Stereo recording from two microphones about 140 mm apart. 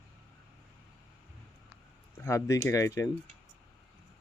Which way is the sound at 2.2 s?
20° left (ahead or behind).